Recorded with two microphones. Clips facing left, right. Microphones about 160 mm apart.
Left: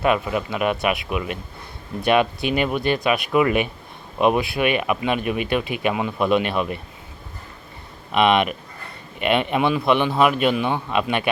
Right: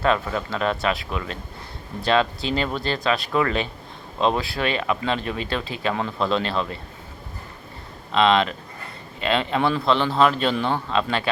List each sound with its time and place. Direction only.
0.0 s speech: 15° left (ahead or behind)
8.1 s speech: 20° left (ahead or behind)